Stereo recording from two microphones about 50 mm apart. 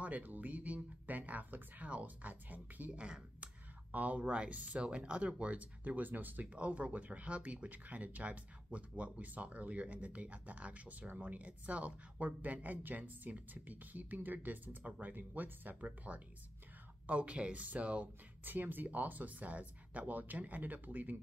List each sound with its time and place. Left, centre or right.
0.0 s speech: right
18.4 s speech: right